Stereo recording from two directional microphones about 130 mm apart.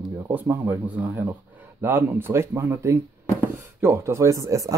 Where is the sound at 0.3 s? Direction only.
15° right (ahead or behind).